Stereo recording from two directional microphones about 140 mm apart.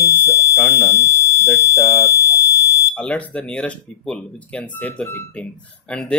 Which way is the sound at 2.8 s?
10° left (ahead or behind).